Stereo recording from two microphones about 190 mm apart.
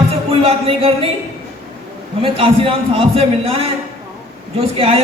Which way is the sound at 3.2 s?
30° right (ahead or behind).